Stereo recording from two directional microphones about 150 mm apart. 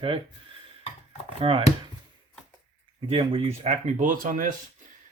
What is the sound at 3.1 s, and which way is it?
Speech, 40° right (ahead or behind).